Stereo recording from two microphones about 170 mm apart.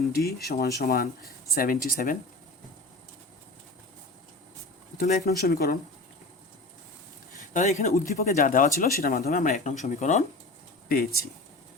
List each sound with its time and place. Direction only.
0.1 s speech: 70° left (ahead or behind)
0.8 s speech: 55° left (ahead or behind)
4.9 s speech: 60° left (ahead or behind)
7.3 s speech: 45° left (ahead or behind)
8.1 s speech: 60° left (ahead or behind)
10.8 s speech: 60° left (ahead or behind)